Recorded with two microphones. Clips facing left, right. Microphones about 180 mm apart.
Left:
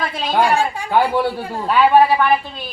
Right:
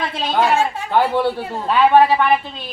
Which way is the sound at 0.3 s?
5° right (ahead or behind).